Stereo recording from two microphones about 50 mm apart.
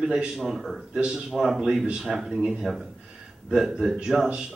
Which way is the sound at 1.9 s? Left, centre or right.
Centre.